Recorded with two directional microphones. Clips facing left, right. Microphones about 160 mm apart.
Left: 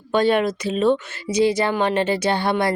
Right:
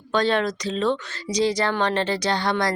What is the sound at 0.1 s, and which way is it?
Speech, 10° left (ahead or behind).